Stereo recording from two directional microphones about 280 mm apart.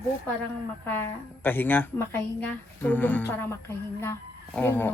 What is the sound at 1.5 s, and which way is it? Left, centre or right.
A woman's voice, centre.